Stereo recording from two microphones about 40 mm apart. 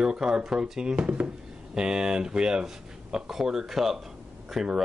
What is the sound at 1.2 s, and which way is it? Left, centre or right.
Speech, centre.